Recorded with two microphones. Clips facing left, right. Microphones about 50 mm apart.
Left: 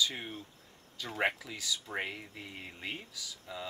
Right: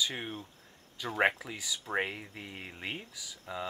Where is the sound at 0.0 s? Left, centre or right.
Right.